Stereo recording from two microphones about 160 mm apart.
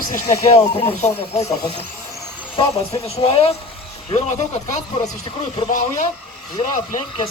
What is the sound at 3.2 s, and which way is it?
Speech, 35° left (ahead or behind).